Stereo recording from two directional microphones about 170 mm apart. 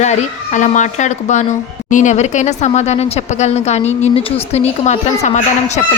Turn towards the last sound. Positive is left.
turn(degrees=45)  # may be behind; listen again after turning